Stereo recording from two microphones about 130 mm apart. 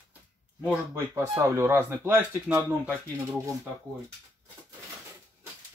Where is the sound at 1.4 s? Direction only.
20° right (ahead or behind).